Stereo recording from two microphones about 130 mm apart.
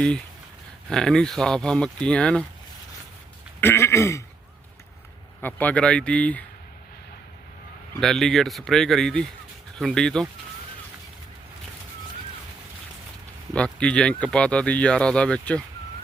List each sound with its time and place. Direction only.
0.9 s speech: 5° left (ahead or behind)
3.6 s throat clearing: 20° left (ahead or behind)
5.4 s speech: 15° left (ahead or behind)
7.9 s speech: 5° left (ahead or behind)
13.5 s speech: 10° left (ahead or behind)